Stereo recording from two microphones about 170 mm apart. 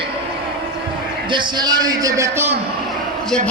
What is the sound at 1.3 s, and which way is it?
A man's voice, 25° right (ahead or behind).